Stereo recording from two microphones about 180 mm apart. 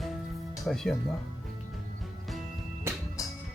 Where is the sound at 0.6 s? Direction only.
Centre (ahead or behind).